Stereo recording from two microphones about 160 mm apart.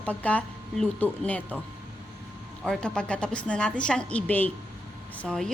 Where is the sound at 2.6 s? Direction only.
5° left (ahead or behind).